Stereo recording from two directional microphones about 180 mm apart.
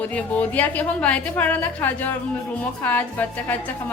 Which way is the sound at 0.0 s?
10° left (ahead or behind).